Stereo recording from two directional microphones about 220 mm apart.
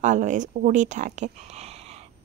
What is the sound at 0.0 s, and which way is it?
A woman's voice, 35° right (ahead or behind).